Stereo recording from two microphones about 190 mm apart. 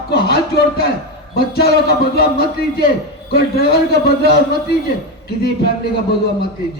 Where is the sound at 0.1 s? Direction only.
55° left (ahead or behind).